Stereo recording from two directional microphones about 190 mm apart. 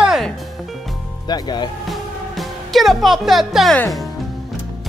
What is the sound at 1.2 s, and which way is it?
Speech, 20° left (ahead or behind).